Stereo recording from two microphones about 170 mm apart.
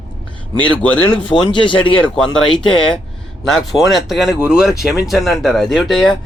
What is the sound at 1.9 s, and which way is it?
A man's voice, 5° left (ahead or behind).